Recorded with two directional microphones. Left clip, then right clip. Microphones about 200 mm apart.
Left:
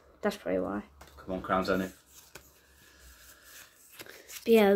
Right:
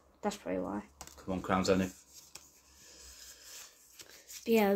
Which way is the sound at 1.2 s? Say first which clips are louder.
Left 2 dB; 35° right (ahead or behind).